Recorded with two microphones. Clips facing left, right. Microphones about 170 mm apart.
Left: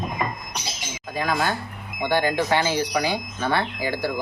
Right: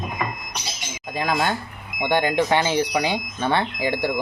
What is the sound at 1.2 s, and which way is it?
Speech, 20° right (ahead or behind).